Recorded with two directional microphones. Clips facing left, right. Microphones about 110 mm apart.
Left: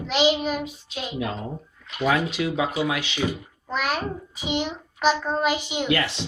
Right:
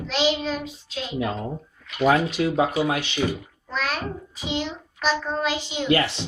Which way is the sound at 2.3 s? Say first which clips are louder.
Right 3 dB; 40° right (ahead or behind).